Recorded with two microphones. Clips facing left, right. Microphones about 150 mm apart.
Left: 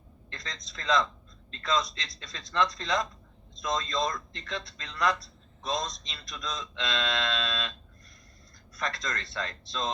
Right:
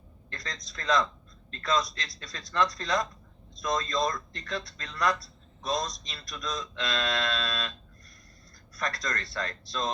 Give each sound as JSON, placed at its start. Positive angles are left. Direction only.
{"t": 0.3, "sound": "a man's voice", "side_deg": 25}
{"t": 8.7, "sound": "speech", "side_deg": 25}